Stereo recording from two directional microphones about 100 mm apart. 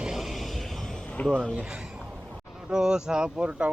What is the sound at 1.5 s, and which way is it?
Speech, 5° right (ahead or behind).